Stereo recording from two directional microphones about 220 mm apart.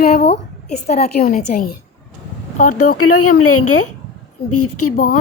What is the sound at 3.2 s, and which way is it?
A woman's voice, 90° left.